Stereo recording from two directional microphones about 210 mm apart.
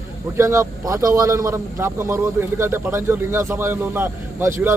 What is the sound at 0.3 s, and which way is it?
A man's voice, 15° right (ahead or behind).